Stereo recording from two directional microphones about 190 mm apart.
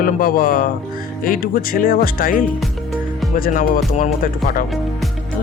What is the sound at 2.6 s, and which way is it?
Music, centre (ahead or behind).